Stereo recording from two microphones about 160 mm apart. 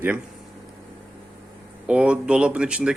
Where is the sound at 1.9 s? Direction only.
5° right (ahead or behind).